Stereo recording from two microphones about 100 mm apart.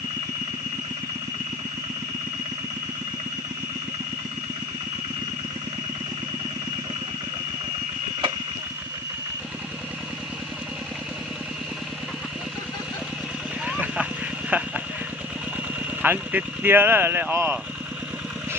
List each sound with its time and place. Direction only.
13.7 s vehicle: 10° right (ahead or behind)
16.0 s speech: 20° right (ahead or behind)